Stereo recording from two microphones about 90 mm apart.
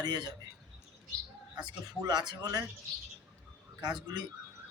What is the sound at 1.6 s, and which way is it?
Speech, 50° right (ahead or behind).